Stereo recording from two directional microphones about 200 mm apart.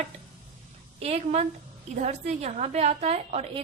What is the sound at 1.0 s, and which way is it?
A woman's voice, 30° right (ahead or behind).